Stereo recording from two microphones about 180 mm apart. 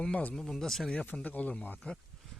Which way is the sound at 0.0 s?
5° left (ahead or behind).